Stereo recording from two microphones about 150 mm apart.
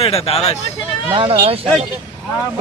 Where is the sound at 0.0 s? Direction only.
40° left (ahead or behind).